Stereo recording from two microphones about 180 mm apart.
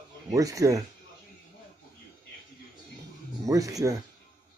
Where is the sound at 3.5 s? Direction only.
20° right (ahead or behind).